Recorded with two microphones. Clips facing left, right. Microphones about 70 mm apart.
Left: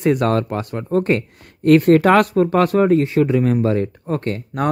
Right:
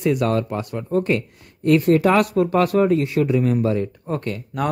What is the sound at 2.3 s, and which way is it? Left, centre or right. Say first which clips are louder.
Speech: left 2 dB; left.